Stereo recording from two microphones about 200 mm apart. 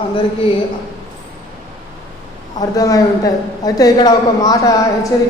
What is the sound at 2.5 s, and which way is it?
A woman's voice, 15° left (ahead or behind).